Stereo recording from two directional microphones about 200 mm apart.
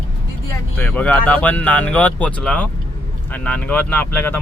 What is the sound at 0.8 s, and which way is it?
Speech, 5° left (ahead or behind).